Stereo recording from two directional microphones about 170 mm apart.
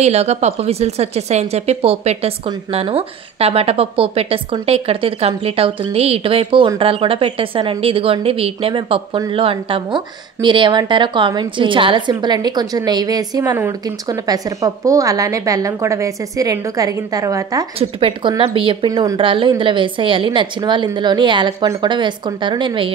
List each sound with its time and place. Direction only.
0.0 s a woman's voice: 40° right (ahead or behind); by 17.6 s 20° right (ahead or behind)
17.7 s a woman's voice: 35° right (ahead or behind)